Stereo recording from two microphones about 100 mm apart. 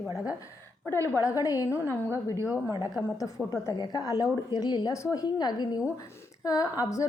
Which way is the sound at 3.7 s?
45° left (ahead or behind).